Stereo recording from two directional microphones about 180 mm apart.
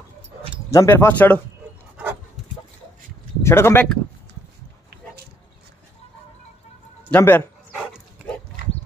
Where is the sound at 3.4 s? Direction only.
15° left (ahead or behind).